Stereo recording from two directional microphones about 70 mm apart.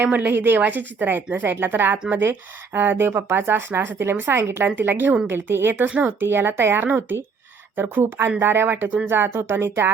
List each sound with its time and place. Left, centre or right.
0.0 s a woman's voice: right
4.6 s a woman's voice: right
5.9 s a woman's voice: centre
6.1 s a woman's voice: right